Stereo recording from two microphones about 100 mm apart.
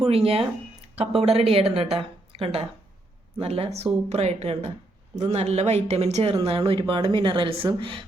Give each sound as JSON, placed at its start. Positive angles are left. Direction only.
{"t": 0.0, "sound": "speech", "side_deg": -75}
{"t": 0.9, "sound": "a woman's voice", "side_deg": -90}
{"t": 6.4, "sound": "speech", "side_deg": -70}